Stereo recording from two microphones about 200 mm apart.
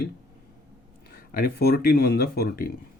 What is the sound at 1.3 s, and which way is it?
Speech, 45° left (ahead or behind).